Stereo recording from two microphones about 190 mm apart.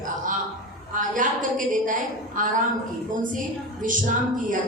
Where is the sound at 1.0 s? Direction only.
45° right (ahead or behind).